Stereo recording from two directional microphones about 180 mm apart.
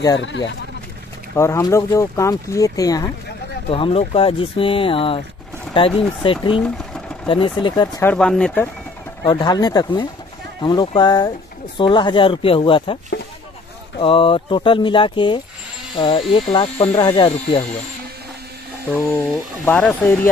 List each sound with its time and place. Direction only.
1.3 s speech: 15° left (ahead or behind)
3.7 s speech: 30° left (ahead or behind)
8.0 s speech: 5° left (ahead or behind)
9.2 s speech: 25° left (ahead or behind)
17.3 s speech: 35° left (ahead or behind)
18.9 s speech: 10° left (ahead or behind)